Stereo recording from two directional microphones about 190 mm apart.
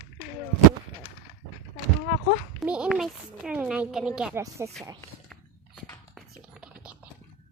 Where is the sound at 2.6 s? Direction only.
5° right (ahead or behind).